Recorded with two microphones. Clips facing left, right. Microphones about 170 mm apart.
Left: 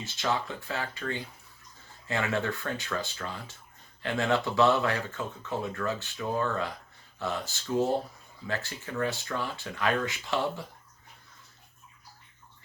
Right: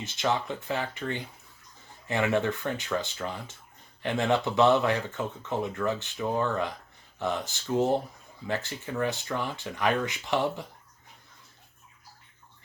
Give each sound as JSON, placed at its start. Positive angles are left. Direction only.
{"t": 0.0, "sound": "speech", "side_deg": -20}